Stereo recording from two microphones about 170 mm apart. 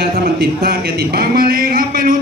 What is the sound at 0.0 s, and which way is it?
Speech, 65° right (ahead or behind).